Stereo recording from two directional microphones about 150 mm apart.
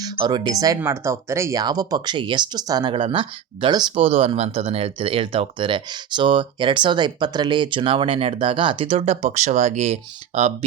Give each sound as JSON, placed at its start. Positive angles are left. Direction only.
{"t": 0.0, "sound": "speech", "side_deg": -30}